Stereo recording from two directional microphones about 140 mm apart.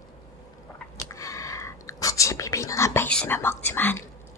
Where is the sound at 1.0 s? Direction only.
20° left (ahead or behind).